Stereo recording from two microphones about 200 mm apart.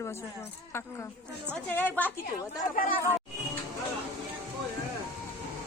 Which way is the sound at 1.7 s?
10° left (ahead or behind).